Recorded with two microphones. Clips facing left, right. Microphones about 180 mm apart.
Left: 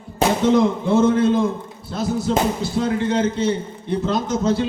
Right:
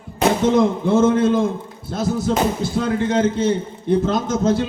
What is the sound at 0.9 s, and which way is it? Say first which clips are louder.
Speech: right 1 dB; 55° right (ahead or behind).